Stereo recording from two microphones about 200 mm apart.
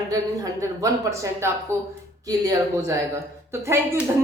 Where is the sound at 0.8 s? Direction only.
15° right (ahead or behind).